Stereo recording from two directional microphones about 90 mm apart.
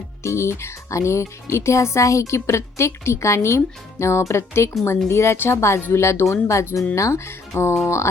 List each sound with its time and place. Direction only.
0.2 s speech: 30° left (ahead or behind)